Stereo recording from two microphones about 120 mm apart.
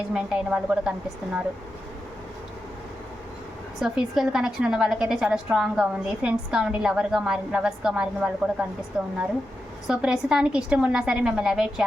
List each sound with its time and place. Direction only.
0.1 s a woman's voice: 5° right (ahead or behind)
3.8 s a woman's voice: 5° right (ahead or behind)